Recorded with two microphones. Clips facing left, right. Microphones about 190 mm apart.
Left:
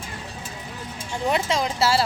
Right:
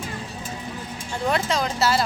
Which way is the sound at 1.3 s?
25° left (ahead or behind).